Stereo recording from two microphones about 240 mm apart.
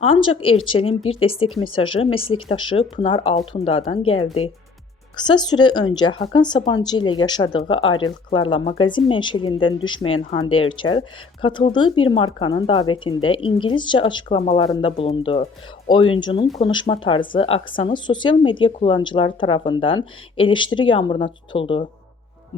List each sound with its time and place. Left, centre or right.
0.1 s speech: left
0.3 s a woman's voice: left